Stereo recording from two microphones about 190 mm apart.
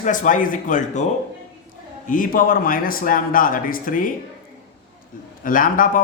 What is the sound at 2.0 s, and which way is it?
Speech, 45° left (ahead or behind).